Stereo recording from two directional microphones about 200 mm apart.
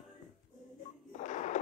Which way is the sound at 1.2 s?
35° left (ahead or behind).